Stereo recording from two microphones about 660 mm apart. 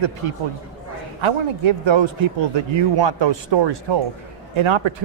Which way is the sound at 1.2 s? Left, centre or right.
Right.